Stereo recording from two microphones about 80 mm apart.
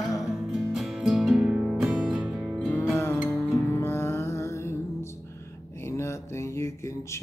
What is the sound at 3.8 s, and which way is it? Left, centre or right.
Music, left.